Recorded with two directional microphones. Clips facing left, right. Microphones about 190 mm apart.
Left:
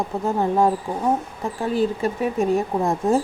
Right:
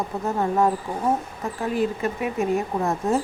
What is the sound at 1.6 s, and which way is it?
Speech, 30° left (ahead or behind).